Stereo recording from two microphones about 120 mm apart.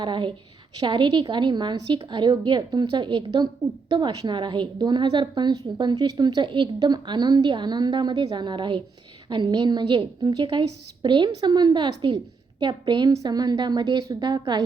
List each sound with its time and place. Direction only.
0.0 s a woman's voice: 40° right (ahead or behind)